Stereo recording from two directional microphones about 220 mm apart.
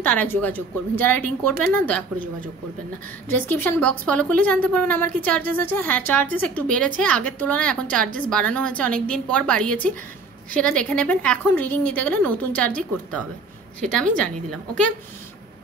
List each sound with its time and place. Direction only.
0.0 s a woman's voice: 5° left (ahead or behind)
3.3 s a woman's voice: 10° left (ahead or behind)